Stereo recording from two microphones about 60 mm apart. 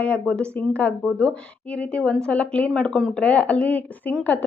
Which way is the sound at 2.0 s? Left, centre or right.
Centre.